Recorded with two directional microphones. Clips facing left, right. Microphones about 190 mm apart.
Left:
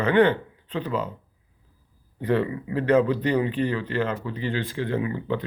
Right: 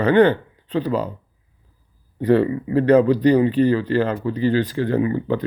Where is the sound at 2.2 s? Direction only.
35° right (ahead or behind).